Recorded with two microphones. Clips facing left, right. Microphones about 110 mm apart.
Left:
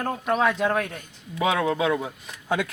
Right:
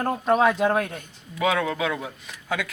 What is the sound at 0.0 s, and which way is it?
Speech, 20° right (ahead or behind).